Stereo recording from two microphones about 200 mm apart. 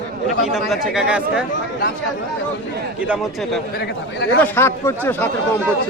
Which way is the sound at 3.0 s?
Centre (ahead or behind).